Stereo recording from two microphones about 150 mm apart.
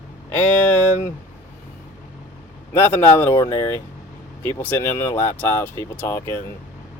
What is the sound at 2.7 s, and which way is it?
Speech, 15° left (ahead or behind).